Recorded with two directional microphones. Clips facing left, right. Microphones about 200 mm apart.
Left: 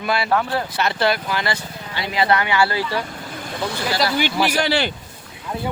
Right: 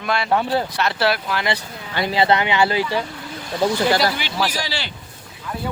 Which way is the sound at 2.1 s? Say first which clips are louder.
Right 1 dB; 25° right (ahead or behind).